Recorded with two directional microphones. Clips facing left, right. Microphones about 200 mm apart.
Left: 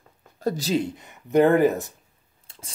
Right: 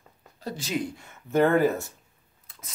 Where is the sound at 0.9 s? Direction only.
15° left (ahead or behind).